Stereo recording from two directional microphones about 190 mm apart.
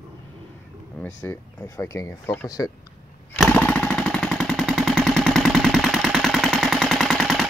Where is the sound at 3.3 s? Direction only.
5° left (ahead or behind).